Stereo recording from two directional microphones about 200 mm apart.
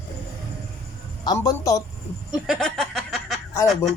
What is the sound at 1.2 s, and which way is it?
Speech, 15° left (ahead or behind).